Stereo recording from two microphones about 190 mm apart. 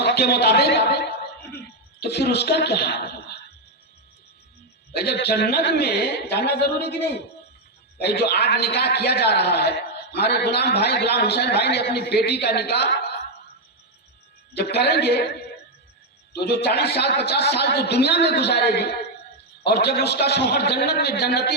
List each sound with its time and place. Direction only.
0.0 s a man's voice: 55° left (ahead or behind)
4.9 s a man's voice: 60° left (ahead or behind)
7.9 s a man's voice: 60° left (ahead or behind)
14.5 s a man's voice: 60° left (ahead or behind)
16.3 s a man's voice: 60° left (ahead or behind)